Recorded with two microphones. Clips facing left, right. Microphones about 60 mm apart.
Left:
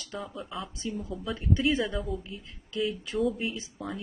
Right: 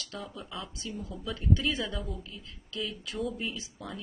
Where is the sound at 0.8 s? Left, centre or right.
Left.